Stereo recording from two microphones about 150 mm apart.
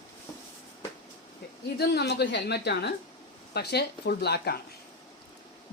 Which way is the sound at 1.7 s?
90° left.